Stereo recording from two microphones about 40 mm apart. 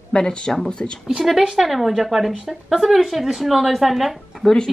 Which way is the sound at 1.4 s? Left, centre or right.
Centre.